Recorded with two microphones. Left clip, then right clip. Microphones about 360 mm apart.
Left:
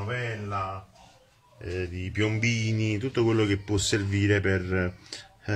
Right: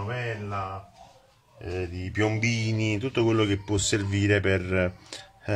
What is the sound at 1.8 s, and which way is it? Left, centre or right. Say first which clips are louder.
Speech: right 2 dB; centre.